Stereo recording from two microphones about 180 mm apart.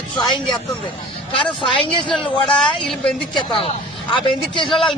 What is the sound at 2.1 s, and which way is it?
Speech, 5° left (ahead or behind).